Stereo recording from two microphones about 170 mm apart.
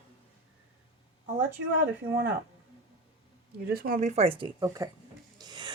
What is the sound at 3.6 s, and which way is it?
Speech, 60° right (ahead or behind).